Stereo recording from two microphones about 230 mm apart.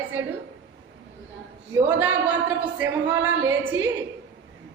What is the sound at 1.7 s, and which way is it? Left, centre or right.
A man's voice, centre.